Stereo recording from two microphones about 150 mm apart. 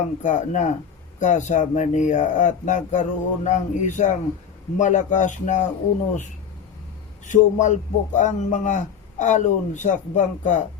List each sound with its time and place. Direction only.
0.2 s a man's voice: 55° left (ahead or behind)
7.3 s a man's voice: 55° left (ahead or behind)